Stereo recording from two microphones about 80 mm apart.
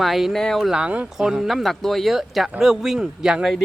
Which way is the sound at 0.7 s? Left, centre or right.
Centre.